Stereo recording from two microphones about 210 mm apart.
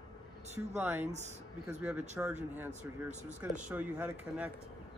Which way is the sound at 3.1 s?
35° right (ahead or behind).